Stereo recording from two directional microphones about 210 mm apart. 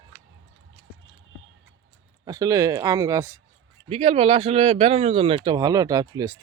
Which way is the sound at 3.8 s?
30° right (ahead or behind).